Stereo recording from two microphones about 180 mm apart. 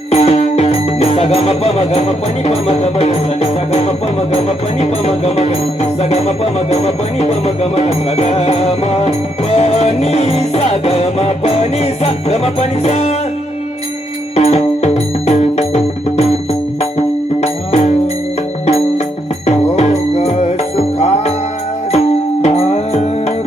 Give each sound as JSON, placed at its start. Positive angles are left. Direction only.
{"t": 0.1, "sound": "music", "side_deg": 35}
{"t": 14.3, "sound": "music", "side_deg": 35}